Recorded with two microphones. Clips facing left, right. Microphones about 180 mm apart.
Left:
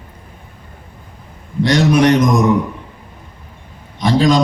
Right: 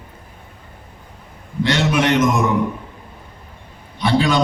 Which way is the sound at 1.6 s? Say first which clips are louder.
Left 6 dB; 35° left (ahead or behind).